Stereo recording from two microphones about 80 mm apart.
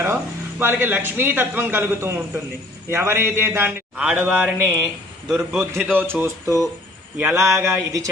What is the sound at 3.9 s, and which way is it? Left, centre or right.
Speech, centre.